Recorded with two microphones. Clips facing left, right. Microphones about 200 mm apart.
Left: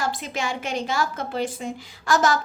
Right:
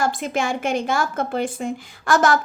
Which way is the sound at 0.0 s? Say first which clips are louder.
Right 5 dB; 50° right (ahead or behind).